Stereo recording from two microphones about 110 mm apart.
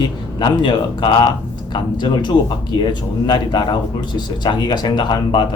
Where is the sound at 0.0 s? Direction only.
40° left (ahead or behind).